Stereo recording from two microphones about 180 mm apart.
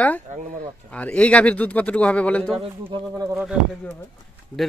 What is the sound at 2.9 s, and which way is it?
Speech, 20° right (ahead or behind).